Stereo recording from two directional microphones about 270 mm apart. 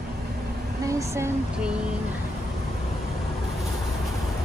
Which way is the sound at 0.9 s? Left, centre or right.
Centre.